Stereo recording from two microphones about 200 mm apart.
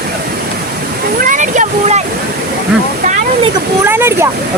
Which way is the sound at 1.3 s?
40° right (ahead or behind).